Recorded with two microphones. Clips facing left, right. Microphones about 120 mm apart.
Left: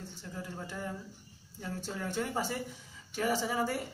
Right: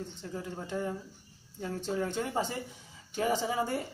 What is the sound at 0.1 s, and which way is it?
Speech, 20° right (ahead or behind).